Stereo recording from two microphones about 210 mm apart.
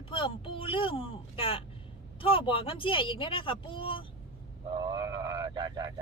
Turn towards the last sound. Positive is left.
turn(degrees=-20)  # may be behind; listen again after turning